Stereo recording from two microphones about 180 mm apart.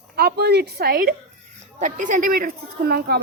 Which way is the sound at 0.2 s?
65° right (ahead or behind).